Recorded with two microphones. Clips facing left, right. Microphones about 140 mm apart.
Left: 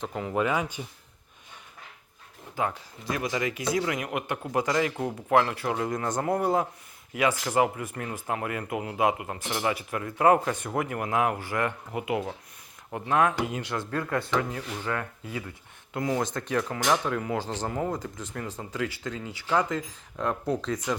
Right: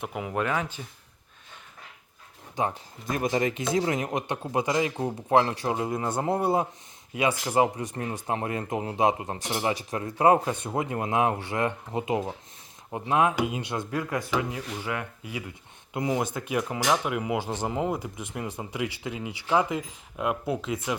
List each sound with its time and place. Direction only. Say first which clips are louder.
0.0 s speech: left 1 dB; 10° right (ahead or behind)
0.3 s speech: left 2 dB; 5° left (ahead or behind)
3.1 s speech: right 3 dB; 45° right (ahead or behind)
3.4 s speech: right 2 dB; 25° right (ahead or behind)
5.9 s speech: even; 10° right (ahead or behind)